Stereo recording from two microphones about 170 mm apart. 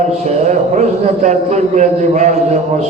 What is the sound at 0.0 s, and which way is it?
A man's voice, 45° right (ahead or behind).